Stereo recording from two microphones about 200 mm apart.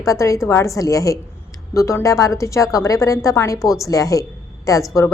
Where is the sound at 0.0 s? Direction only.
15° left (ahead or behind).